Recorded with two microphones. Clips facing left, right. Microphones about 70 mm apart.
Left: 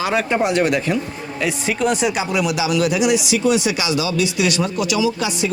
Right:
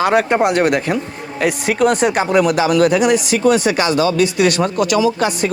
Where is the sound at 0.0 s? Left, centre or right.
Right.